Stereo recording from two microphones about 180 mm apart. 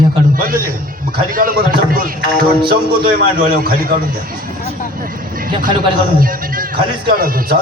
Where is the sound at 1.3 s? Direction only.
50° right (ahead or behind).